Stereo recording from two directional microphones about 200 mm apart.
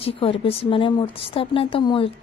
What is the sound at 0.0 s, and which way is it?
Speech, 25° left (ahead or behind).